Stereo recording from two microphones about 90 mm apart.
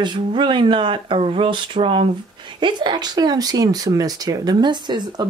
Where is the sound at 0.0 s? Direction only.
60° right (ahead or behind); by 2.0 s 75° right (ahead or behind).